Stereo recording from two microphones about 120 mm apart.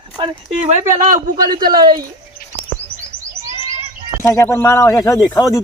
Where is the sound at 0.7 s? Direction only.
85° right.